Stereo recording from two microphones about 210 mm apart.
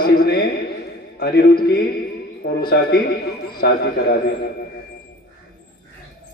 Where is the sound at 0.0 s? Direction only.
45° left (ahead or behind).